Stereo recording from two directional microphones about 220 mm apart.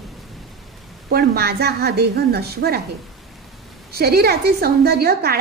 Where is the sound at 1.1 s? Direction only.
45° right (ahead or behind).